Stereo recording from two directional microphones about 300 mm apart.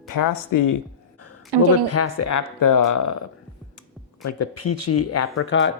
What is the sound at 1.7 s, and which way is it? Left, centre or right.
Speech, left.